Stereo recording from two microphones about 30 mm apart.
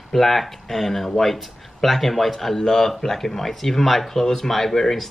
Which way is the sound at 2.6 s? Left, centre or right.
Centre.